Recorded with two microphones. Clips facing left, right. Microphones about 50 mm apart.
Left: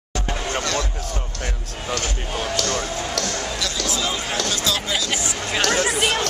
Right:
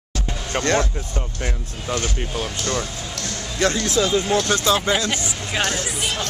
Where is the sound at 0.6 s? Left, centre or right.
Right.